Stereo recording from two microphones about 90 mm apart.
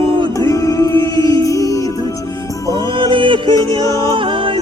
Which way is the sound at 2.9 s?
65° right (ahead or behind).